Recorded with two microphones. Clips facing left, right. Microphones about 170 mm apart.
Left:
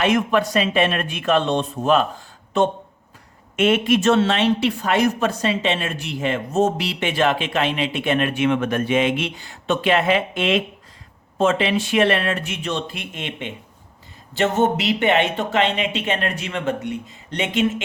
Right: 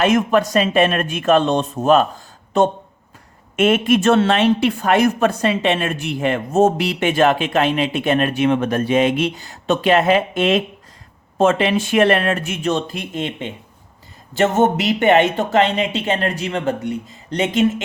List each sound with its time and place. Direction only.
0.0 s a woman's voice: 45° right (ahead or behind)